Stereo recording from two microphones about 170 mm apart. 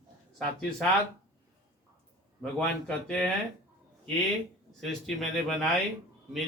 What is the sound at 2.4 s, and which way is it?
Speech, 5° left (ahead or behind).